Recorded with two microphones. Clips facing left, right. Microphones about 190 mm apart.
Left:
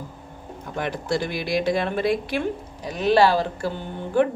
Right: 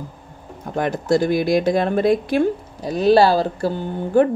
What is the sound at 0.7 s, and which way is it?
Speech, 45° right (ahead or behind).